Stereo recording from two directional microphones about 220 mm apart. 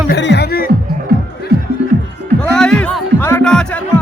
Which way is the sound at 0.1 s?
50° left (ahead or behind).